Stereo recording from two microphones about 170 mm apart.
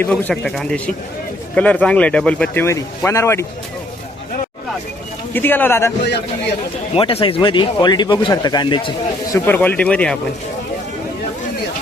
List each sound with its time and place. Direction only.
0.0 s speech: 5° left (ahead or behind)
2.6 s speech: 15° left (ahead or behind)
5.3 s speech: 10° left (ahead or behind)
6.9 s a man's voice: 35° left (ahead or behind)
9.3 s speech: 10° left (ahead or behind)